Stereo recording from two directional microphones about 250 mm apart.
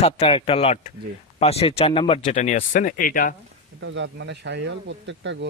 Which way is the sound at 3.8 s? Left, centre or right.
Right.